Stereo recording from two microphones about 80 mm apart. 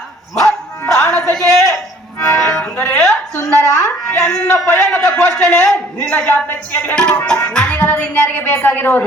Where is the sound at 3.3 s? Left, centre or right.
Left.